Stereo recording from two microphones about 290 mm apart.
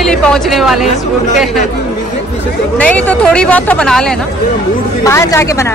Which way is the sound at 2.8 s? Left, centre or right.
Centre.